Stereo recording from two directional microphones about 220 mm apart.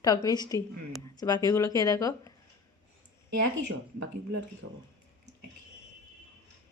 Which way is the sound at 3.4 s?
60° right (ahead or behind).